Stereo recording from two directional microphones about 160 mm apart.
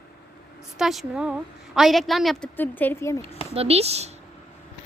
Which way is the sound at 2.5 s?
10° left (ahead or behind).